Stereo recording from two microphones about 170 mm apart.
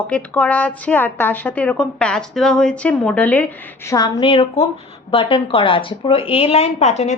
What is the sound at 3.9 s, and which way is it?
A woman's voice, 25° left (ahead or behind).